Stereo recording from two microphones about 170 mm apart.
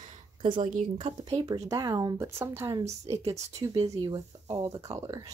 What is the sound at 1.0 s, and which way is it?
Speech, 25° right (ahead or behind).